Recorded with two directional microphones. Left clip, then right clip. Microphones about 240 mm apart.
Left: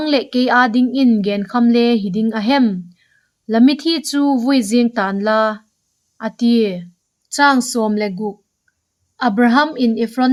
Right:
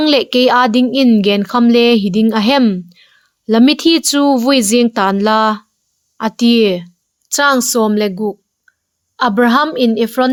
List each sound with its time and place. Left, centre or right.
0.0 s speech: right